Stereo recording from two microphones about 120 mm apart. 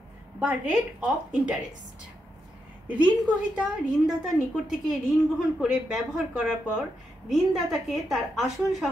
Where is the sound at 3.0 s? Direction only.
5° right (ahead or behind).